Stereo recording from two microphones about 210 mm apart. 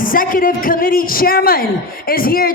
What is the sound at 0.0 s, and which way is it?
A man's voice, 40° left (ahead or behind).